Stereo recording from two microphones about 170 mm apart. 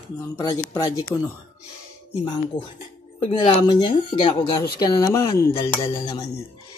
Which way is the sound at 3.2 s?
30° left (ahead or behind).